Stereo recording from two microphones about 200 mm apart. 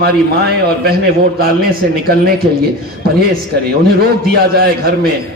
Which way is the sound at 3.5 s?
55° right (ahead or behind).